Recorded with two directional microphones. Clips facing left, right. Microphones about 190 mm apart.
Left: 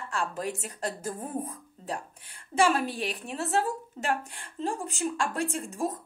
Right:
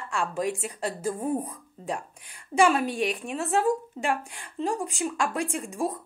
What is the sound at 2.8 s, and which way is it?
Speech, 35° left (ahead or behind).